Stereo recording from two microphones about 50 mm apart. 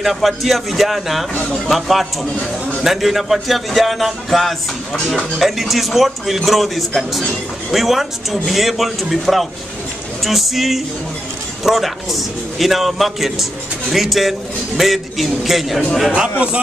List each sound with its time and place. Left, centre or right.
0.0 s a man's voice: centre
16.1 s a man's voice: right